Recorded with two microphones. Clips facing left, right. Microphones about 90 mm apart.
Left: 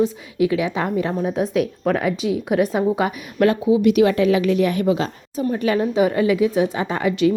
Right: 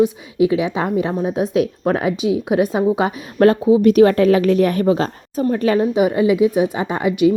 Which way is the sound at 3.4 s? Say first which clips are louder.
Right 4 dB; 35° right (ahead or behind).